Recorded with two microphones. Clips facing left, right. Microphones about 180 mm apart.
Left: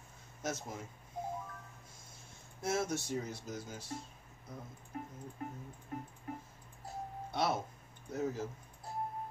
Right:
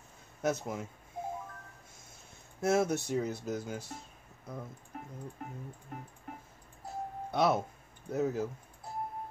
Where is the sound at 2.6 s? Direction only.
60° right (ahead or behind).